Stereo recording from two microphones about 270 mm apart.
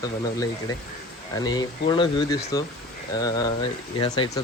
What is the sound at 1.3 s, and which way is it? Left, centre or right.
Speech, centre.